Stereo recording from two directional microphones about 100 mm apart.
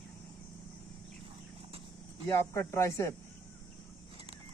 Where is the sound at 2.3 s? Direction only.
30° left (ahead or behind).